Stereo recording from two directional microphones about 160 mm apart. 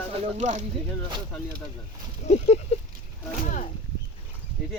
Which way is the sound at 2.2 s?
45° left (ahead or behind).